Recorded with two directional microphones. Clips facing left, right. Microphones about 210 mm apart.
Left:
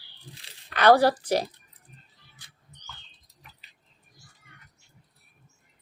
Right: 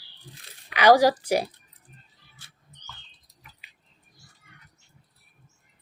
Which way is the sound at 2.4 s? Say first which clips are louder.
Right 2 dB; 15° left (ahead or behind).